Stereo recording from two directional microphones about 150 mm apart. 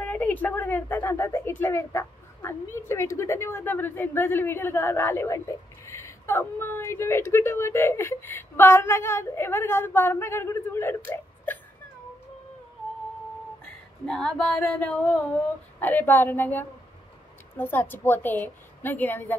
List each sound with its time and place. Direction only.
0.0 s a woman's voice: 10° left (ahead or behind)
14.0 s a woman's voice: 5° left (ahead or behind)